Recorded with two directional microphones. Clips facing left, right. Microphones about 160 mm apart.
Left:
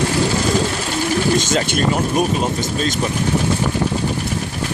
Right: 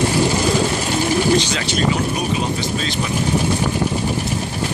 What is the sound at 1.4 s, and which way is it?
Speech, 45° left (ahead or behind).